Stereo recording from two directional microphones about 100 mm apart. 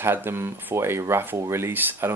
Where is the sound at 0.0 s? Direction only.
25° right (ahead or behind).